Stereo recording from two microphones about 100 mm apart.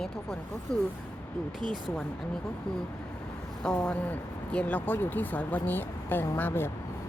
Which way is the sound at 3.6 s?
10° left (ahead or behind).